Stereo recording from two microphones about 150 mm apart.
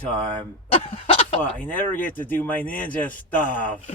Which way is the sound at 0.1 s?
10° left (ahead or behind).